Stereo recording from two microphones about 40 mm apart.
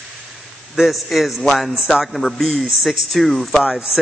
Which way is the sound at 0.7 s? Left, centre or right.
Centre.